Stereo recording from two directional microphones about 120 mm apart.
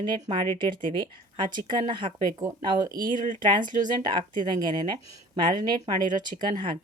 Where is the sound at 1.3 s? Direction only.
40° right (ahead or behind).